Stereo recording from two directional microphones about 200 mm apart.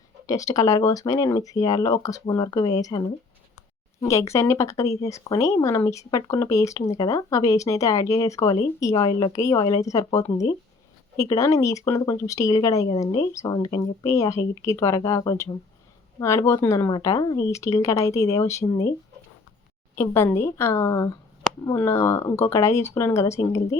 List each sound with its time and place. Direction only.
0.3 s speech: 15° left (ahead or behind)
4.0 s speech: 15° left (ahead or behind)
20.0 s speech: 15° left (ahead or behind)